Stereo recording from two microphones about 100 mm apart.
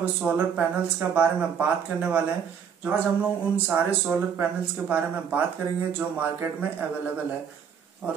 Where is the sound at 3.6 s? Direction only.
15° right (ahead or behind).